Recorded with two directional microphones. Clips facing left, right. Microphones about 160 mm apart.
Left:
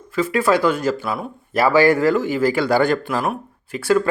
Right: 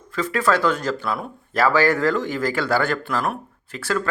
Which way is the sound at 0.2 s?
10° left (ahead or behind).